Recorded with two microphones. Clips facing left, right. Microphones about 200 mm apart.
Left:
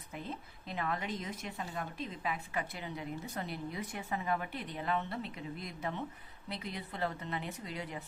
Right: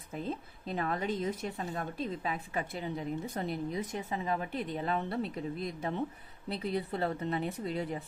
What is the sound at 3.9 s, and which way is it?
A woman's voice, 25° right (ahead or behind).